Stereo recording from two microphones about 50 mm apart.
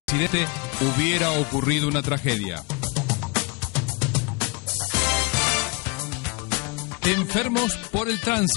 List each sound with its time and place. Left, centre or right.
0.1 s speech: left
4.9 s music: left